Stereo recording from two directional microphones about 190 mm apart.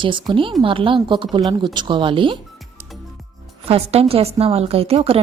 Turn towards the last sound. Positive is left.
turn(degrees=-30)  # may be behind; listen again after turning